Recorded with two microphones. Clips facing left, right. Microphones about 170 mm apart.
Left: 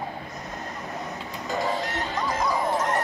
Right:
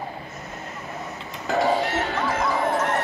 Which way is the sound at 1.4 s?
70° right (ahead or behind).